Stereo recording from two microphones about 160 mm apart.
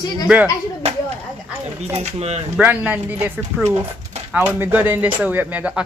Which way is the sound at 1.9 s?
45° right (ahead or behind).